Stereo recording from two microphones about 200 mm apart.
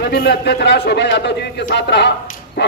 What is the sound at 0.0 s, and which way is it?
A man's voice, 50° left (ahead or behind).